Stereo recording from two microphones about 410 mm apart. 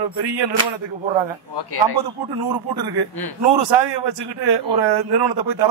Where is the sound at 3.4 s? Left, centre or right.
Right.